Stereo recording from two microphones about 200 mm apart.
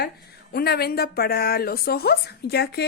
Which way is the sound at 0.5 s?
50° left (ahead or behind).